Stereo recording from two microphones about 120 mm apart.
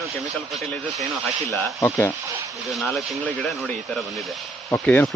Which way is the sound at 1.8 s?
20° left (ahead or behind).